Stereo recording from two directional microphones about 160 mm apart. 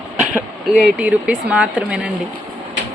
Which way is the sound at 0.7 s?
5° right (ahead or behind).